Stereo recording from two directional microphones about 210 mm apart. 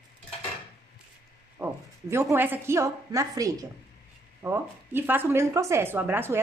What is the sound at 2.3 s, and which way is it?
A woman's voice, 10° right (ahead or behind).